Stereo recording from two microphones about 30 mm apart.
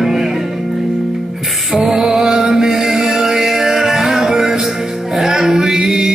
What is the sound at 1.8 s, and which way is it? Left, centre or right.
Music, centre.